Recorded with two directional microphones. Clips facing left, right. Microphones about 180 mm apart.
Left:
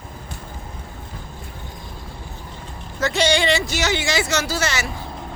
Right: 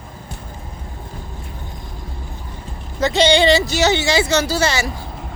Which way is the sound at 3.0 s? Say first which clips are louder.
Right 5 dB; 20° right (ahead or behind).